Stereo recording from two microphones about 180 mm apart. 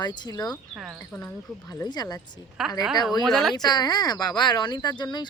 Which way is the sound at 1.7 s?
20° left (ahead or behind).